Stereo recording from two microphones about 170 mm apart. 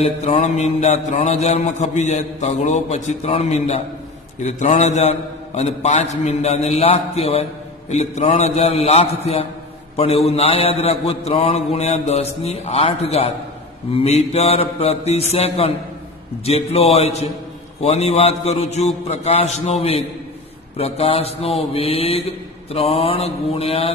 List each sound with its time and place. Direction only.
0.0 s mantra: 40° left (ahead or behind)